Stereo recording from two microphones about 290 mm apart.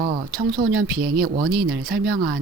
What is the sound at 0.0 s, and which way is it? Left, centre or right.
Speech, right.